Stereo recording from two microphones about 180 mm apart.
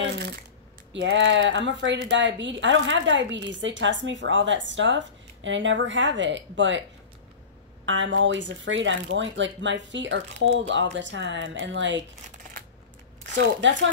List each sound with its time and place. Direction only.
0.0 s speech: 70° right (ahead or behind)
0.9 s a woman's voice: 90° right
7.8 s a woman's voice: 90° right
13.4 s a woman's voice: 90° right